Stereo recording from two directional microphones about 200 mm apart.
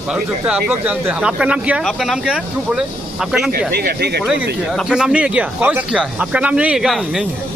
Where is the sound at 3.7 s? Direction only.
55° right (ahead or behind).